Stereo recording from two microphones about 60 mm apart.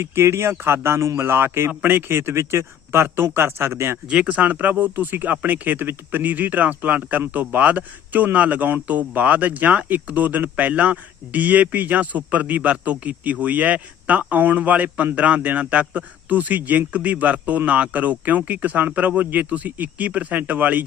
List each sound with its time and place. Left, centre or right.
0.0 s speech: right
4.1 s speech: right